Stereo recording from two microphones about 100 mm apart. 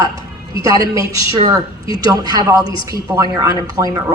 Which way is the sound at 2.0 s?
40° right (ahead or behind).